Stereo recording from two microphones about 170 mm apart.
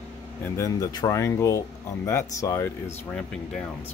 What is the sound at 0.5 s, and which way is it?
Speech, 20° left (ahead or behind).